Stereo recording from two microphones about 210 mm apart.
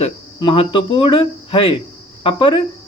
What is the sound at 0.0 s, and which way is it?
Speech, 25° left (ahead or behind).